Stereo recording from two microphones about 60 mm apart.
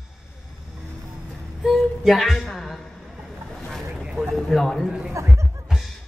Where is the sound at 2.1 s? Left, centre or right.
Centre.